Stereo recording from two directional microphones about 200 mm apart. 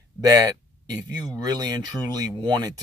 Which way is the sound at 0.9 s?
20° right (ahead or behind).